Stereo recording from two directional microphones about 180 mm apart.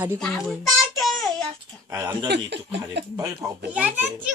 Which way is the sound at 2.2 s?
70° right (ahead or behind).